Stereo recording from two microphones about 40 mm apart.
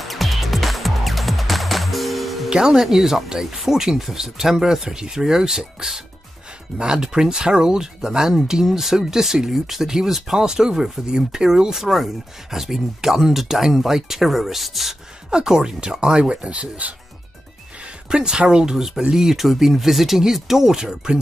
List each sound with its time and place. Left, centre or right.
0.0 s music: centre
2.5 s speech: centre
15.2 s speech: centre; by 16.9 s right
18.1 s speech: right
19.2 s speech: centre